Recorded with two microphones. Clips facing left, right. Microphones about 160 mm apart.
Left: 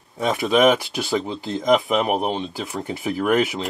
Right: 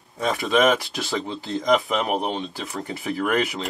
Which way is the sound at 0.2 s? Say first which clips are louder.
Left 3 dB; centre (ahead or behind).